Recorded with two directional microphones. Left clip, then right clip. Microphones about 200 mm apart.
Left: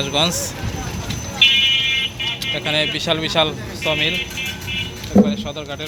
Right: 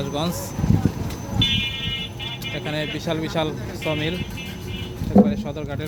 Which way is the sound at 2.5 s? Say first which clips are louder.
Left 8 dB; 5° right (ahead or behind).